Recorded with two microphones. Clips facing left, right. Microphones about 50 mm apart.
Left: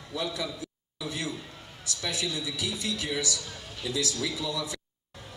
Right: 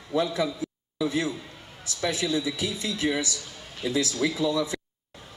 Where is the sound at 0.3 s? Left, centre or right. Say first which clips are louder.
Right 7 dB; right.